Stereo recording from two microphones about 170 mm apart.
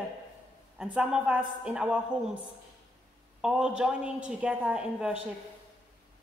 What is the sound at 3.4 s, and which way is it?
A woman's voice, 5° right (ahead or behind).